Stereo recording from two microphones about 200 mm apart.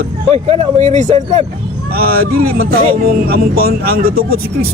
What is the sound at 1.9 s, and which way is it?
Speech, 50° right (ahead or behind).